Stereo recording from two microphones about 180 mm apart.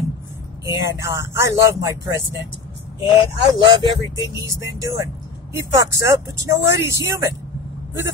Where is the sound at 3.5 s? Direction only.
20° right (ahead or behind).